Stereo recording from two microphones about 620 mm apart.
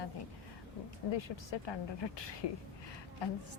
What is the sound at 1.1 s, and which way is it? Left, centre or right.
Speech, left.